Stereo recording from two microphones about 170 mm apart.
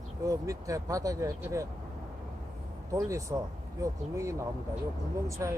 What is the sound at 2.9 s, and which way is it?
Speech, 20° right (ahead or behind).